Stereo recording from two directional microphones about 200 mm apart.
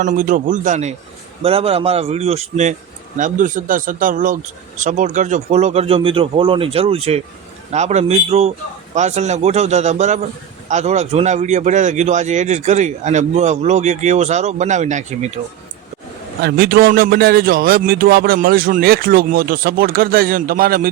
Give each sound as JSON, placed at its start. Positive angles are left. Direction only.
{"t": 0.0, "sound": "speech", "side_deg": -40}
{"t": 16.4, "sound": "speech", "side_deg": -50}